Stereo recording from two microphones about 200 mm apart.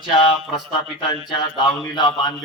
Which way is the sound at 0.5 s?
25° left (ahead or behind).